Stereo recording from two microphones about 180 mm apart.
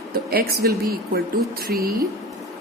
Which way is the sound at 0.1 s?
55° right (ahead or behind).